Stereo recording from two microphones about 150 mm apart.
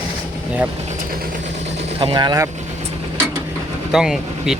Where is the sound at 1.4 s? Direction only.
45° right (ahead or behind).